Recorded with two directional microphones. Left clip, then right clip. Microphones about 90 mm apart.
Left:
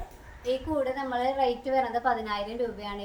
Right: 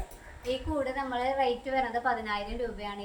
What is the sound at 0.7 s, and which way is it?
A woman's voice, 15° left (ahead or behind).